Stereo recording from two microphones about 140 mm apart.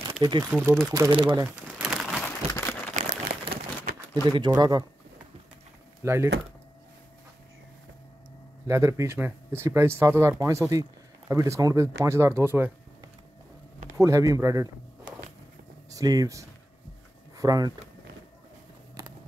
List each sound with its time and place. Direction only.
0.2 s speech: 30° right (ahead or behind)
0.5 s speech: 15° right (ahead or behind)
1.1 s speech: 35° right (ahead or behind)
1.8 s crumpling: 5° right (ahead or behind)
2.5 s crumpling: 15° left (ahead or behind)
2.9 s a sound: 70° right (ahead or behind)
4.1 s speech: 30° right (ahead or behind)
6.0 s speech: 20° right (ahead or behind)
8.6 s speech: 20° right (ahead or behind)
13.9 s speech: 20° right (ahead or behind)